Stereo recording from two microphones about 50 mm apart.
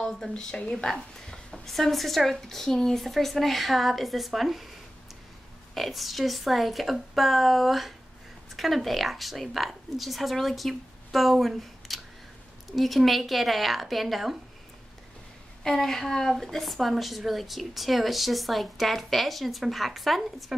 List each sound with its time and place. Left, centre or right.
0.3 s a woman's voice: centre
5.8 s a woman's voice: centre
15.6 s a woman's voice: centre